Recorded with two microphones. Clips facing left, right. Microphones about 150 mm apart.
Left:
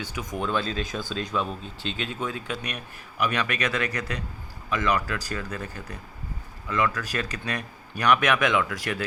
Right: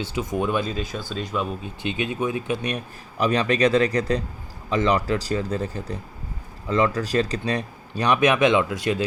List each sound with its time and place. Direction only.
0.0 s speech: 25° right (ahead or behind); by 1.7 s 5° right (ahead or behind)
1.8 s speech: 15° right (ahead or behind)